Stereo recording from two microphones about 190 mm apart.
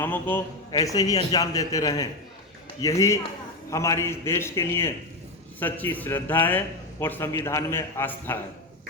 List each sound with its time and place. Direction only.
0.0 s a man's voice: 10° left (ahead or behind)